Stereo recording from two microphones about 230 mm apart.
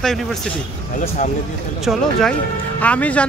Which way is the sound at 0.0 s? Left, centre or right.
Centre.